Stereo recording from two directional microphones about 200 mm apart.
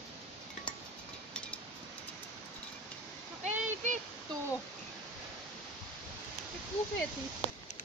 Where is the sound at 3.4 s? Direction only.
35° right (ahead or behind).